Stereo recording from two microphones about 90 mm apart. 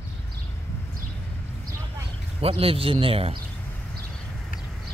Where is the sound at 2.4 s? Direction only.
90° right.